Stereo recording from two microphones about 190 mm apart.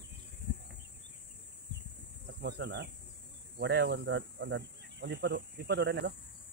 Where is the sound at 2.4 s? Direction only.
60° right (ahead or behind).